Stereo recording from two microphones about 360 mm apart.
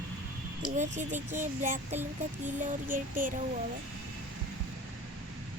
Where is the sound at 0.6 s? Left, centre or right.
Right.